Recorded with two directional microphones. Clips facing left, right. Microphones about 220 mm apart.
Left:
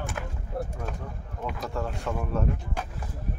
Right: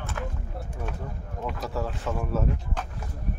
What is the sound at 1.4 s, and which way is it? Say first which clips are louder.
Speech: right 1 dB; 5° right (ahead or behind).